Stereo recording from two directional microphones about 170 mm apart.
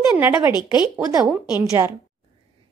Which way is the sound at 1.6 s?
15° right (ahead or behind).